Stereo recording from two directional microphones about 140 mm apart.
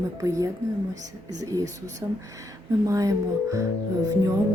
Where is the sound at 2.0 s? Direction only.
20° right (ahead or behind).